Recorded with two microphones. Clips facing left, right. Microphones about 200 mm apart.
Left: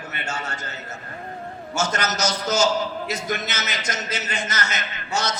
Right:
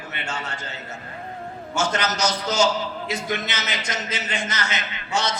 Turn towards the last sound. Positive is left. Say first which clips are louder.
# right 1 dB
turn(degrees=45)  # may be behind; listen again after turning